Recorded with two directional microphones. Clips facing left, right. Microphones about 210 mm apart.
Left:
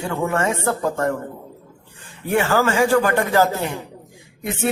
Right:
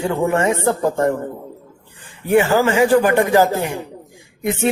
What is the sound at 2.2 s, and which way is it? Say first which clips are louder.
A man's voice: right 4 dB; 15° right (ahead or behind).